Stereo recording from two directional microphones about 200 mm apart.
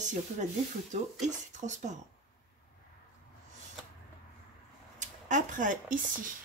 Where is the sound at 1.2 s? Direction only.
35° right (ahead or behind).